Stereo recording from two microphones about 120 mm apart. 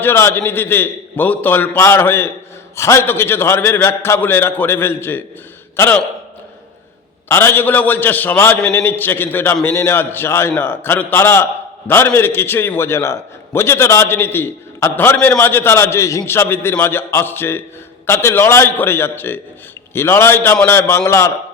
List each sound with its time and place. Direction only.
0.0 s a man's voice: 20° left (ahead or behind)
7.3 s a man's voice: 20° left (ahead or behind)